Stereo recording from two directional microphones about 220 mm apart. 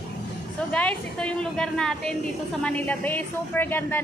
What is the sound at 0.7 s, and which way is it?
A woman's voice, 5° left (ahead or behind).